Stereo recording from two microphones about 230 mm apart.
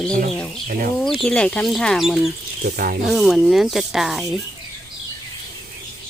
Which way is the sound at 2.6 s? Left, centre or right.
Right.